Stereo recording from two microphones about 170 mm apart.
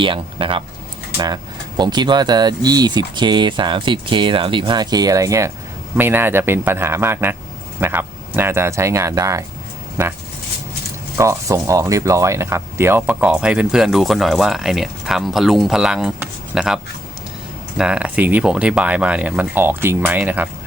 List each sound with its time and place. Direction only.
0.0 s speech: 30° right (ahead or behind)
11.2 s speech: 20° right (ahead or behind)